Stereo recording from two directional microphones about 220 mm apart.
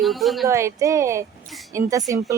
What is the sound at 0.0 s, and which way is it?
Speech, centre (ahead or behind).